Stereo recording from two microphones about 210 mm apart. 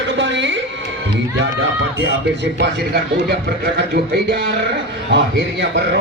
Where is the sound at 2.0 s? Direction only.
55° right (ahead or behind).